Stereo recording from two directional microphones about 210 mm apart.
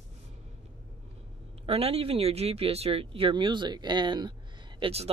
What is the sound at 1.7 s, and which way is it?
Speech, 30° right (ahead or behind).